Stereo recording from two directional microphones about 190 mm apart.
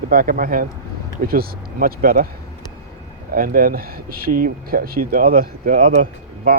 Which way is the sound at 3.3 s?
50° right (ahead or behind).